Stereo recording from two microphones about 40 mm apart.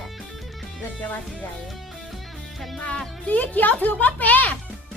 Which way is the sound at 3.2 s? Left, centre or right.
Left.